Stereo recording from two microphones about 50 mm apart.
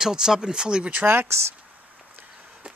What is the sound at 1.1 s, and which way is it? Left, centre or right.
Speech, right.